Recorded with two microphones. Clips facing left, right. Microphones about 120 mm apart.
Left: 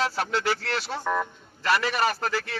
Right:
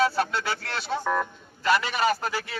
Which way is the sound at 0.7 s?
Centre (ahead or behind).